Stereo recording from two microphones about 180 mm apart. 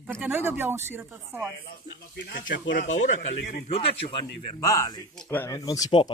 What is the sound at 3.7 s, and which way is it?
Speech, 30° left (ahead or behind).